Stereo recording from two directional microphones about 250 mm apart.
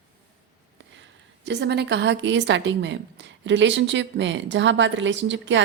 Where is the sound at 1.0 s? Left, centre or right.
Right.